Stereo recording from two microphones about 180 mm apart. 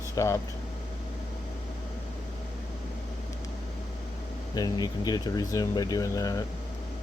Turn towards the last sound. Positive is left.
turn(degrees=20)  # may be behind; listen again after turning